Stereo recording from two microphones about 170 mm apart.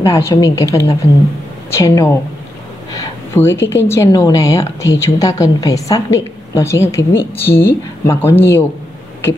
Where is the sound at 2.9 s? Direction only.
15° left (ahead or behind).